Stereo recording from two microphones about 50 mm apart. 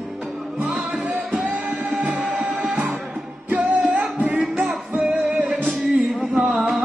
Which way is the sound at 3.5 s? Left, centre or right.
Right.